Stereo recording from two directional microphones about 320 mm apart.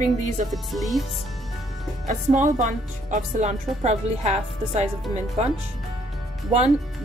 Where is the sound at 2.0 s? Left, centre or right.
Right.